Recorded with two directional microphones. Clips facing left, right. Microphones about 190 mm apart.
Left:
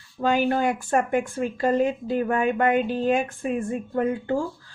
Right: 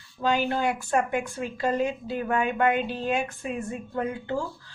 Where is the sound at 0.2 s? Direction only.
45° left (ahead or behind).